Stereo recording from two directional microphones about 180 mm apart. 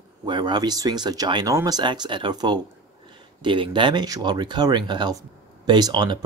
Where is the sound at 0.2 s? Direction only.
25° right (ahead or behind).